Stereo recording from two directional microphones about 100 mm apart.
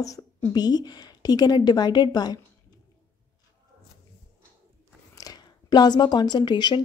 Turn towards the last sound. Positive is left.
turn(degrees=45)  # may be behind; listen again after turning